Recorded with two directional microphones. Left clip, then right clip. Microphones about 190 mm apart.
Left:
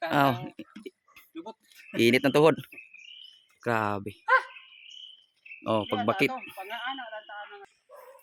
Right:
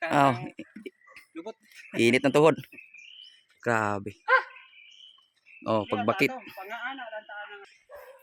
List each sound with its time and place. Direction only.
0.0 s a sound: 5° right (ahead or behind)
0.9 s tick-tock: centre (ahead or behind)
1.4 s a sound: 15° right (ahead or behind)
2.0 s speech: 5° left (ahead or behind)
5.6 s speech: 5° right (ahead or behind)
6.6 s radio: 25° right (ahead or behind)